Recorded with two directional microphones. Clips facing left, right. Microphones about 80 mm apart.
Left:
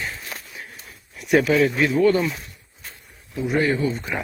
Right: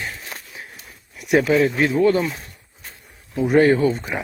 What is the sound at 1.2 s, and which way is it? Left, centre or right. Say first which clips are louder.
Speech: right 1 dB; centre.